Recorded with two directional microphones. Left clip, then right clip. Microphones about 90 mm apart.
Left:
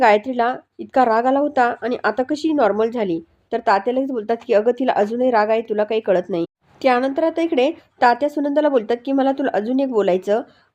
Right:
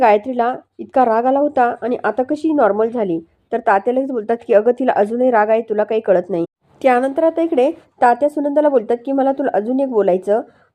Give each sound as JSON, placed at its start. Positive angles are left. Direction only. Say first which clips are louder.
{"t": 0.0, "sound": "a woman's voice", "louder": "right 2 dB", "side_deg": -30}
{"t": 2.6, "sound": "a woman's voice", "louder": "right 3 dB", "side_deg": -15}
{"t": 7.2, "sound": "a woman's voice", "louder": "right 3 dB", "side_deg": -15}